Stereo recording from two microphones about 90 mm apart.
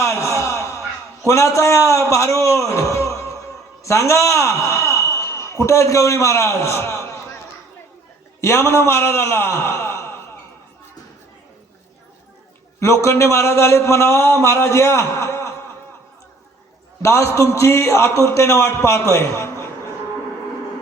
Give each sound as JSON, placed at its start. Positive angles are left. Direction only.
{"t": 0.0, "sound": "a sound", "side_deg": 35}
{"t": 1.3, "sound": "a man's voice", "side_deg": 35}
{"t": 8.4, "sound": "a man's voice", "side_deg": 30}
{"t": 12.8, "sound": "speech", "side_deg": 30}
{"t": 17.0, "sound": "speech", "side_deg": 30}